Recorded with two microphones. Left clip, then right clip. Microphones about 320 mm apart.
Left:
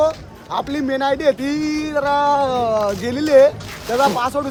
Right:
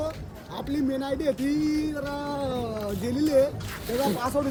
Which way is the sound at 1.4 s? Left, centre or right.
Centre.